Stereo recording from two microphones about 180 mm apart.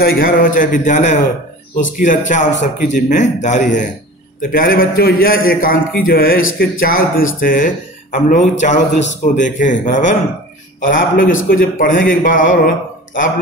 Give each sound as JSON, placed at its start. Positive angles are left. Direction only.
{"t": 0.0, "sound": "a man's voice", "side_deg": 55}